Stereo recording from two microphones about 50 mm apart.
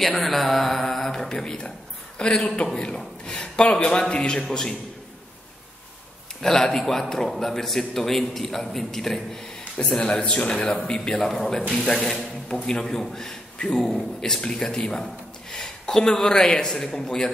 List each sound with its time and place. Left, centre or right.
0.0 s a man's voice: centre
6.4 s a man's voice: centre
9.8 s a man's voice: left